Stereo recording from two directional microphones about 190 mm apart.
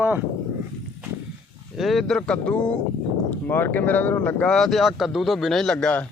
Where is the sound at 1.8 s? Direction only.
Centre (ahead or behind).